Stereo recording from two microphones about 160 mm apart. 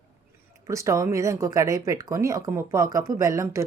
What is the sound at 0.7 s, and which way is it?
Speech, 20° right (ahead or behind).